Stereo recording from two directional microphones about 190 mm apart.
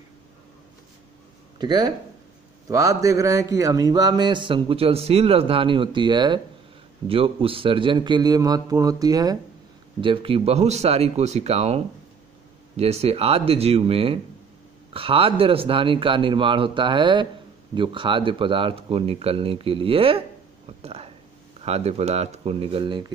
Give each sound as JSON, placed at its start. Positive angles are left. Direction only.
{"t": 1.6, "sound": "speech", "side_deg": -20}